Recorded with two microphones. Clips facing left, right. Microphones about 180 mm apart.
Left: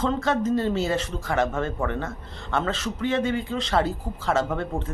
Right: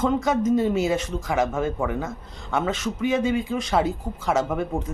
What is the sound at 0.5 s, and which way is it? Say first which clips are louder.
Speech: right 2 dB; 5° right (ahead or behind).